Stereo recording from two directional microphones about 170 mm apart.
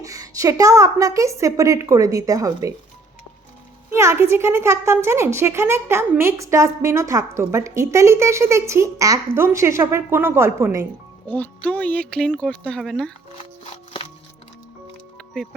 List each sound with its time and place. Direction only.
0.0 s a woman's voice: 20° right (ahead or behind)
3.9 s a woman's voice: 15° right (ahead or behind)
11.3 s speech: 10° left (ahead or behind)